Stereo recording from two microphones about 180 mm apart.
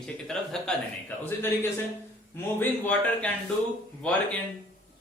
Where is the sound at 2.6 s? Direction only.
10° left (ahead or behind).